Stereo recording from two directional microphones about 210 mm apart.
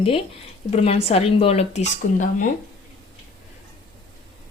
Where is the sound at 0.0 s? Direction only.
25° left (ahead or behind).